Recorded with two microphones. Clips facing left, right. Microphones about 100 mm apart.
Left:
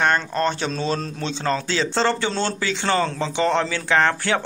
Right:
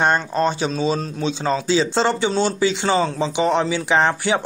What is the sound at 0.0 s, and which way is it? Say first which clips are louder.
Speech: right 2 dB; 15° right (ahead or behind).